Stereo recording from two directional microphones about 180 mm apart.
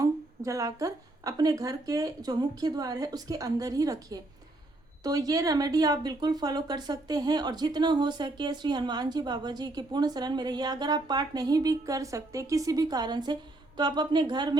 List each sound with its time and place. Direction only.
0.0 s speech: 20° right (ahead or behind)